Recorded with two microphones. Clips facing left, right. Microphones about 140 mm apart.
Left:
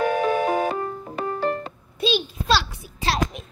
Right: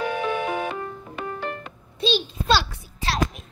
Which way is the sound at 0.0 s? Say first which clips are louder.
Left 4 dB; 45° left (ahead or behind).